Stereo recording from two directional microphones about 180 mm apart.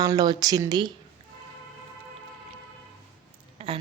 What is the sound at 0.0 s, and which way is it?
Speech, 20° right (ahead or behind).